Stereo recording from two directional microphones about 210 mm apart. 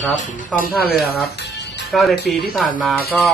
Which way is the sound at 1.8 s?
Centre (ahead or behind).